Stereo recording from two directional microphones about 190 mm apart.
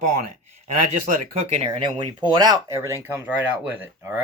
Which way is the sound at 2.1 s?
20° right (ahead or behind).